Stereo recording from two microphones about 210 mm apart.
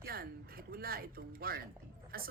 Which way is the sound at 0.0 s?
45° right (ahead or behind).